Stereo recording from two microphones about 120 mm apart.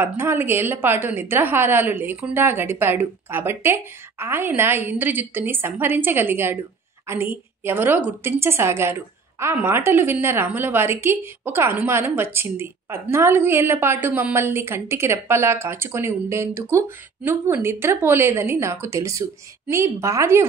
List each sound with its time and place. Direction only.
0.0 s a woman's voice: 20° right (ahead or behind)
7.6 s a woman's voice: 20° right (ahead or behind)